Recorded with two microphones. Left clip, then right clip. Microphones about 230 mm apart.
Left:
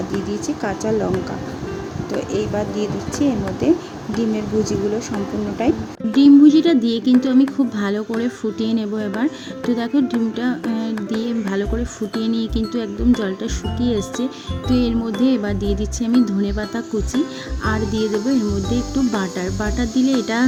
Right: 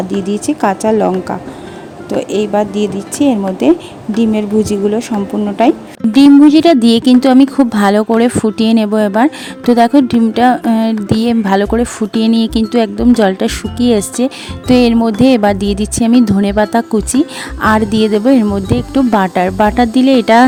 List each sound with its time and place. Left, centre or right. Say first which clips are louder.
0.3 s a woman's voice: right 10 dB; right
2.0 s a woman's voice: right 8 dB; right
6.1 s speech: right 5 dB; right